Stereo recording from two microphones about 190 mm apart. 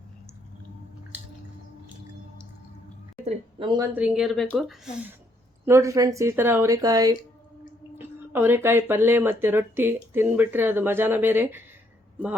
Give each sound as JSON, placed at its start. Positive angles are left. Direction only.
{"t": 3.2, "sound": "speech", "side_deg": -25}
{"t": 3.9, "sound": "speech", "side_deg": -5}
{"t": 5.6, "sound": "speech", "side_deg": -15}